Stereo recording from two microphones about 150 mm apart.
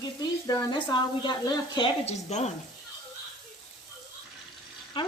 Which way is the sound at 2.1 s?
45° left (ahead or behind).